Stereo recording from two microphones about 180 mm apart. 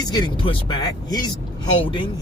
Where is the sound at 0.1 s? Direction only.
25° left (ahead or behind).